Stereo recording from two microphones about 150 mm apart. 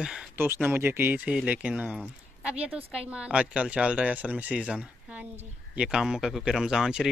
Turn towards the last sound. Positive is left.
turn(degrees=-5)  # may be behind; listen again after turning